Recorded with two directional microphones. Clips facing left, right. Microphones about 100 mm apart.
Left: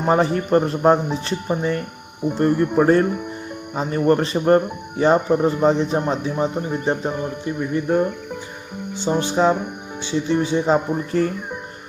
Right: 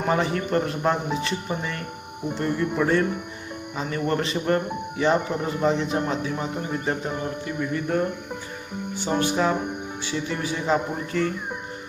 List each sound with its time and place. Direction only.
0.0 s speech: 30° left (ahead or behind)